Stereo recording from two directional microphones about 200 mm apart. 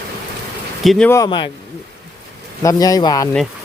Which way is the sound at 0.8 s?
Centre (ahead or behind).